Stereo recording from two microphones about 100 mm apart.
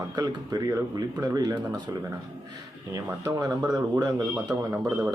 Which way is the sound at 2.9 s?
35° right (ahead or behind).